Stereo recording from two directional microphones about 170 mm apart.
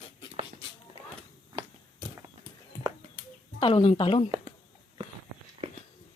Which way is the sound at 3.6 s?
30° left (ahead or behind).